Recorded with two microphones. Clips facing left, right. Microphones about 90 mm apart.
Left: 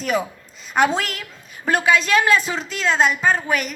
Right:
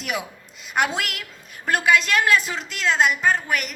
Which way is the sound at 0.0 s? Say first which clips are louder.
Left 7 dB; 5° right (ahead or behind).